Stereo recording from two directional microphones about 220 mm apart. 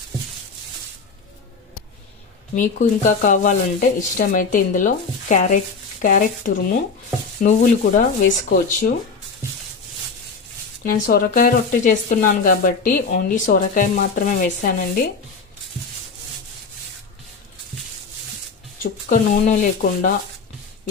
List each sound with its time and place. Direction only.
2.5 s speech: 35° left (ahead or behind)
10.8 s speech: 40° left (ahead or behind)
18.8 s speech: 35° left (ahead or behind)